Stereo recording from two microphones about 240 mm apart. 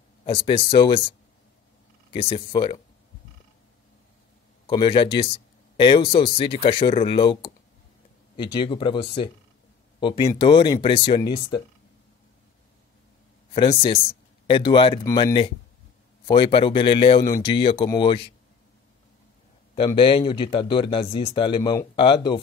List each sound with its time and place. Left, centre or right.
0.2 s speech: left
2.1 s speech: left
4.6 s speech: left
13.5 s speech: left
19.7 s speech: centre